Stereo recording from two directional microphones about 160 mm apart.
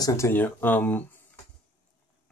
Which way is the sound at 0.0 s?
20° left (ahead or behind).